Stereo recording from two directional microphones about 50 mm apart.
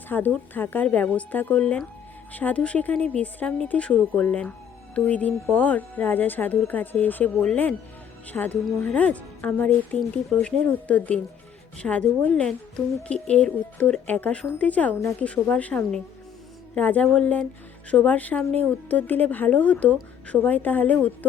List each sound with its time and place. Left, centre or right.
0.1 s speech: left
0.9 s speech: left
8.3 s speech: left